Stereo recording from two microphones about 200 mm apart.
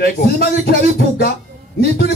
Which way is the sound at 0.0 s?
50° left (ahead or behind).